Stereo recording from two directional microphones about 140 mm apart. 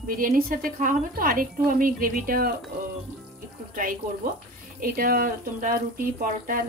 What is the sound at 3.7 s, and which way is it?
Speech, 80° right.